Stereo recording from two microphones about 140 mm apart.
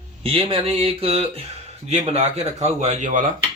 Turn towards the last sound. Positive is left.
turn(degrees=-60)  # may be behind; listen again after turning